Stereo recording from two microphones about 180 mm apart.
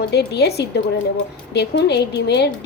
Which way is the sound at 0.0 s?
65° left (ahead or behind).